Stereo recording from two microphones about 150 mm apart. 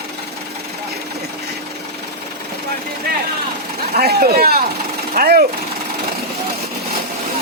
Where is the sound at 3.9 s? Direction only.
90° right.